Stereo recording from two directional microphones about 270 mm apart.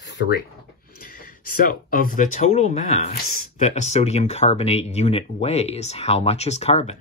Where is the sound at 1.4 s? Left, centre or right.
Left.